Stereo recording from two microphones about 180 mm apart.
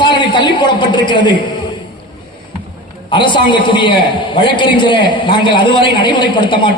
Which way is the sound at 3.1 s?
25° left (ahead or behind).